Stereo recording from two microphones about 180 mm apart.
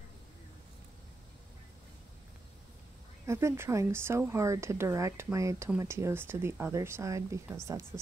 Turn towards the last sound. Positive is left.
turn(degrees=-15)  # may be behind; listen again after turning